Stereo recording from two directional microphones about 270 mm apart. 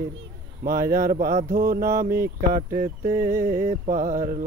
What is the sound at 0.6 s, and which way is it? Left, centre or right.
Speech, right.